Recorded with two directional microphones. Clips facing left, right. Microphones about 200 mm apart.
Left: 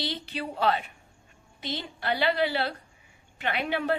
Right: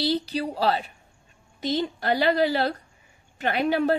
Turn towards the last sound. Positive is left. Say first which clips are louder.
# right 6 dB
turn(degrees=-40)  # may be behind; listen again after turning